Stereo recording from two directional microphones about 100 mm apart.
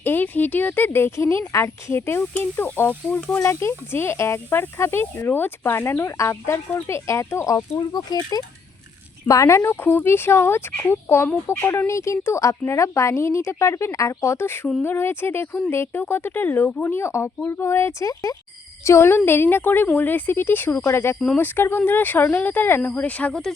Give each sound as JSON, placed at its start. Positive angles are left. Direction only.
{"t": 0.0, "sound": "speech", "side_deg": 20}
{"t": 3.3, "sound": "speech", "side_deg": 25}
{"t": 18.1, "sound": "speech", "side_deg": 35}
{"t": 18.9, "sound": "speech", "side_deg": 25}